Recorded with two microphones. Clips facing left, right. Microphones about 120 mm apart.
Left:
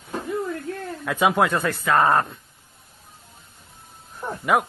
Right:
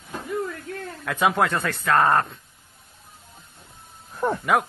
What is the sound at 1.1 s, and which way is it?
Speech, centre (ahead or behind).